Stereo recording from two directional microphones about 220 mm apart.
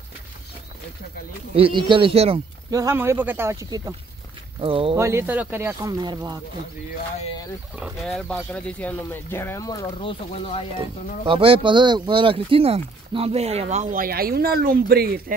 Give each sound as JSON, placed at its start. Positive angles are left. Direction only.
{"t": 1.6, "sound": "speech", "side_deg": -20}
{"t": 2.7, "sound": "speech", "side_deg": -15}
{"t": 4.6, "sound": "speech", "side_deg": -25}
{"t": 4.9, "sound": "speech", "side_deg": -15}
{"t": 7.8, "sound": "speech", "side_deg": 0}
{"t": 11.2, "sound": "speech", "side_deg": -25}